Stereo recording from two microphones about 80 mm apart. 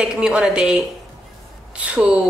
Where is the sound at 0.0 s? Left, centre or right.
Centre.